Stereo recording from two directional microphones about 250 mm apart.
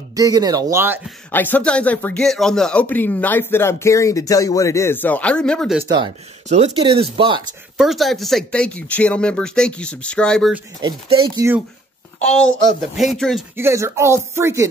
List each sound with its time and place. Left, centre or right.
0.1 s speech: centre
1.3 s speech: centre
5.9 s speech: centre
7.7 s speech: centre
10.8 s speech: centre
12.3 s speech: centre
13.6 s speech: centre